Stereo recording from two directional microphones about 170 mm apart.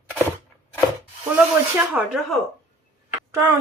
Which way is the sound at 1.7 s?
10° right (ahead or behind).